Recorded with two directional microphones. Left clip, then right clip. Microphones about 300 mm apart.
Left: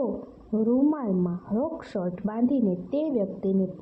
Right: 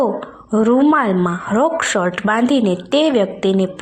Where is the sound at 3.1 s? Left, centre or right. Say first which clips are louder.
Right 12 dB; right.